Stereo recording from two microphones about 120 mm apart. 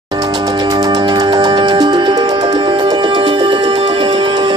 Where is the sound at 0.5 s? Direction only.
30° right (ahead or behind).